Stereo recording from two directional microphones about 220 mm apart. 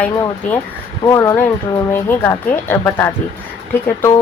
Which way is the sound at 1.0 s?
15° left (ahead or behind).